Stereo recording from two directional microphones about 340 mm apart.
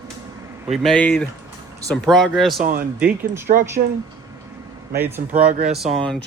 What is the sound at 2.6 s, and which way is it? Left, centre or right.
Speech, right.